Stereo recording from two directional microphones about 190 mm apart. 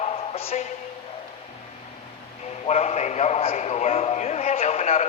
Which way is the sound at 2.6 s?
35° left (ahead or behind).